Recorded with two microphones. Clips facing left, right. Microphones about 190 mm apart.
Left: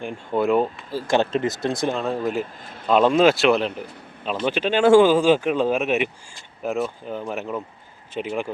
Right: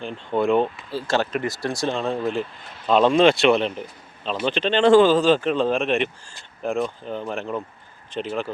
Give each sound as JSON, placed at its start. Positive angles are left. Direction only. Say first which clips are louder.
{"t": 0.0, "sound": "speech", "louder": "even", "side_deg": 10}
{"t": 0.9, "sound": "speech", "louder": "left 3 dB", "side_deg": 20}
{"t": 1.9, "sound": "a man's voice", "louder": "even", "side_deg": 5}